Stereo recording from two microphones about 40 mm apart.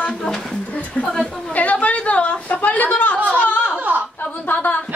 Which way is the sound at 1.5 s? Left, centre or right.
Left.